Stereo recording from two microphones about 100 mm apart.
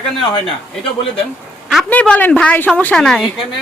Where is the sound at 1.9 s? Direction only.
15° left (ahead or behind).